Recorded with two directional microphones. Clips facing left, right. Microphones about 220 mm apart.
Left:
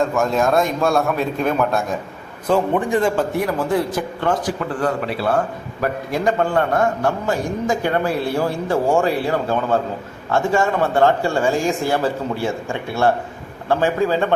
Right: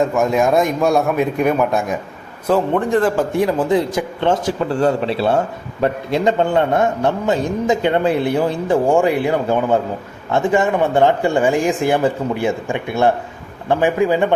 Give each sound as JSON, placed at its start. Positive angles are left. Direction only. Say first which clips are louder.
{"t": 0.0, "sound": "speech", "louder": "right 2 dB", "side_deg": -15}
{"t": 2.5, "sound": "a man's voice", "louder": "right 2 dB", "side_deg": -5}
{"t": 3.3, "sound": "a man's voice", "louder": "right 4 dB", "side_deg": -20}